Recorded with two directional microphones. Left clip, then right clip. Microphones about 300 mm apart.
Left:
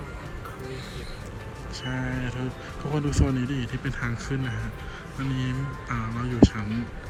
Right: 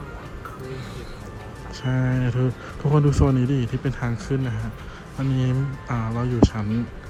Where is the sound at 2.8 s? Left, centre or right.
Left.